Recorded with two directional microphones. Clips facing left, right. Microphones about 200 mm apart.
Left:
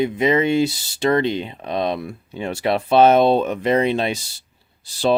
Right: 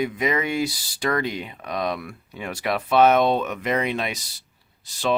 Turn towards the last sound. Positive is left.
turn(degrees=30)  # may be behind; listen again after turning